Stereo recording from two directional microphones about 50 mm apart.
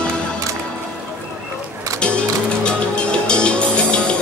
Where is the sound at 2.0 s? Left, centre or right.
Left.